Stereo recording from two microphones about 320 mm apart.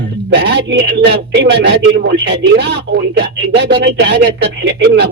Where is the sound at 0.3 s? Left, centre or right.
Right.